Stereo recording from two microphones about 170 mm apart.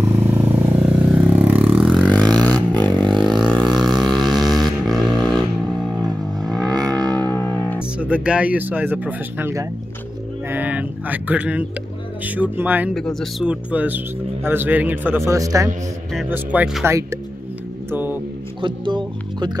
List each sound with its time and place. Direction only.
0.0 s vehicle: 20° right (ahead or behind); by 2.3 s 5° left (ahead or behind)
2.9 s a sound: centre (ahead or behind)
6.4 s a sound: centre (ahead or behind)
6.7 s music: 20° right (ahead or behind)
7.2 s music: 10° left (ahead or behind)
8.0 s speech: 5° right (ahead or behind)
12.9 s speech: centre (ahead or behind); by 15.7 s 20° right (ahead or behind)
16.3 s speech: 5° right (ahead or behind)
17.9 s a sound: 10° right (ahead or behind)
18.6 s speech: 30° right (ahead or behind)